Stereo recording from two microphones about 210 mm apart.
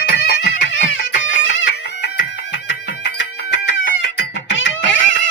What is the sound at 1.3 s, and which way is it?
Music, 65° left (ahead or behind).